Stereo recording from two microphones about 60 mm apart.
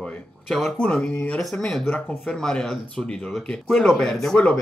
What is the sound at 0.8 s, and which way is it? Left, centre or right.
Speech, centre.